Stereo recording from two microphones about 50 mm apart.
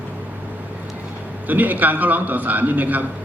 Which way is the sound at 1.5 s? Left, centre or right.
Right.